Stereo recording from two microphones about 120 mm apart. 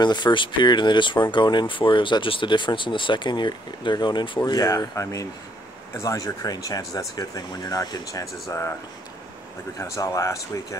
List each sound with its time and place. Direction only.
0.0 s speech: 40° left (ahead or behind)
4.4 s speech: 30° left (ahead or behind)
9.8 s speech: 25° left (ahead or behind)